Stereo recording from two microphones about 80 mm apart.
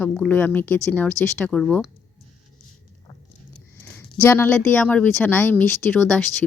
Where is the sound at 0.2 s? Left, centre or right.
Left.